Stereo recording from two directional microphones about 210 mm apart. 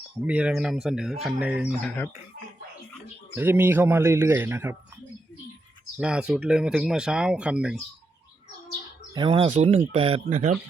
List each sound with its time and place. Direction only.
0.3 s speech: 5° right (ahead or behind)
3.3 s a man's voice: 10° right (ahead or behind)
6.0 s speech: 5° right (ahead or behind)
9.1 s speech: 25° right (ahead or behind)